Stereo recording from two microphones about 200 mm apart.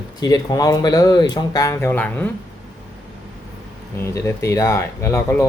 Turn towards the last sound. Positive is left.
turn(degrees=15)  # may be behind; listen again after turning